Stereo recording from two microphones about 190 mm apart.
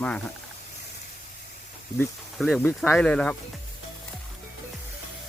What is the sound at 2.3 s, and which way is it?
Speech, centre (ahead or behind).